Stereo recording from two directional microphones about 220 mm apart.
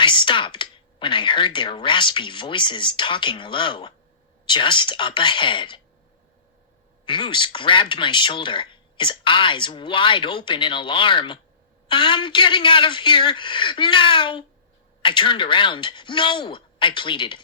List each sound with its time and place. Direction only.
0.0 s speech: 20° left (ahead or behind)
7.0 s speech: 20° left (ahead or behind)